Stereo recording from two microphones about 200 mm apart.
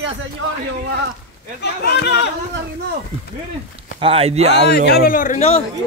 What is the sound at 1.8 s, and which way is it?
Speech, 55° left (ahead or behind).